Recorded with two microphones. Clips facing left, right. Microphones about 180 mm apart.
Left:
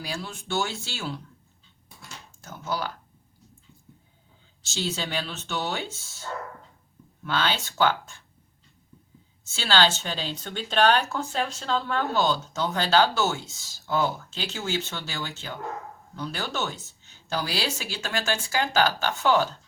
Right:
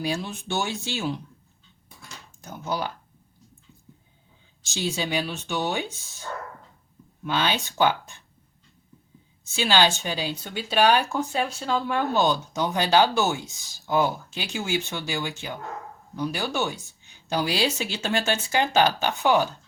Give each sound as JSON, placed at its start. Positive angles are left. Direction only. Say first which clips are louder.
{"t": 0.0, "sound": "speech", "louder": "right 6 dB", "side_deg": -20}
{"t": 2.4, "sound": "speech", "louder": "right 2 dB", "side_deg": -15}
{"t": 4.6, "sound": "speech", "louder": "right 2 dB", "side_deg": -15}
{"t": 7.3, "sound": "speech", "louder": "right 2 dB", "side_deg": -15}
{"t": 9.5, "sound": "speech", "louder": "right 2 dB", "side_deg": -15}